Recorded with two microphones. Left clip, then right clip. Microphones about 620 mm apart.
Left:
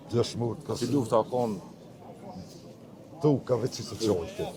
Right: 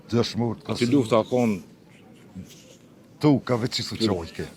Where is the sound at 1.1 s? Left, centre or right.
Right.